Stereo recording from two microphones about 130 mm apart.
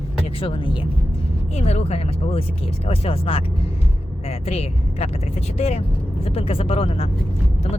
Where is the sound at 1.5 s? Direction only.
55° left (ahead or behind).